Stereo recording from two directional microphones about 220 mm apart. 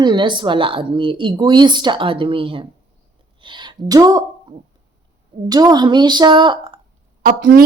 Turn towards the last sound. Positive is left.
turn(degrees=-40)  # may be behind; listen again after turning